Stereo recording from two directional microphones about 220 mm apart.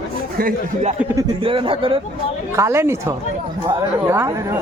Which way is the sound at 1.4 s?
25° right (ahead or behind).